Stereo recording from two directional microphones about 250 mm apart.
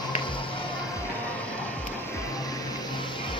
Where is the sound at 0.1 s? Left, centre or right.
Centre.